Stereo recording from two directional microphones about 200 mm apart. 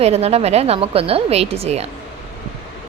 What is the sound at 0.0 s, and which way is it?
Speech, 30° right (ahead or behind).